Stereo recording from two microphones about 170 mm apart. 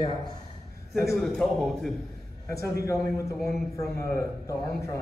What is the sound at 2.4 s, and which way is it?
Speech, 15° left (ahead or behind).